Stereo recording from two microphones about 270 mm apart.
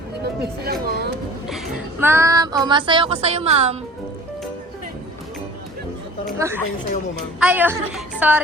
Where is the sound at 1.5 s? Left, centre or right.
Centre.